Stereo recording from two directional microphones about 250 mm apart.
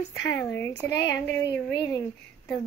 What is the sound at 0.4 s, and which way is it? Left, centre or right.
A woman's voice, centre.